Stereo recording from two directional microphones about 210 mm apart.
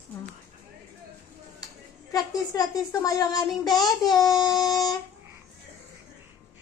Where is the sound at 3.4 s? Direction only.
Centre (ahead or behind).